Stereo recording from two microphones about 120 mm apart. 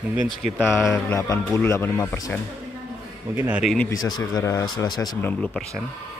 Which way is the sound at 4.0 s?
30° left (ahead or behind).